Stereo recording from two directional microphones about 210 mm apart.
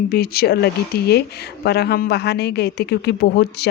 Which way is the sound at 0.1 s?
45° left (ahead or behind).